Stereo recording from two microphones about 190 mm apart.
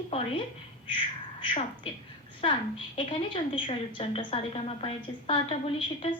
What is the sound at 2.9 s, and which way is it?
A woman's voice, 25° left (ahead or behind).